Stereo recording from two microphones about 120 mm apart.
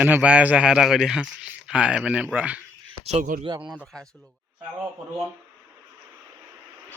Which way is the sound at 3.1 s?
85° right.